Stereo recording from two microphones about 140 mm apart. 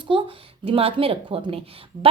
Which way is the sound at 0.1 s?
40° right (ahead or behind).